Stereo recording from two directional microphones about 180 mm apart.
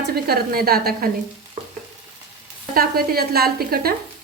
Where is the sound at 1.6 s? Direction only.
45° right (ahead or behind).